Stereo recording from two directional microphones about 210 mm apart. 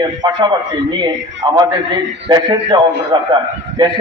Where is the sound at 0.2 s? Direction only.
20° right (ahead or behind).